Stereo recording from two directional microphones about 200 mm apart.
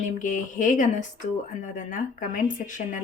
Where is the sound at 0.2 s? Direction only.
40° left (ahead or behind).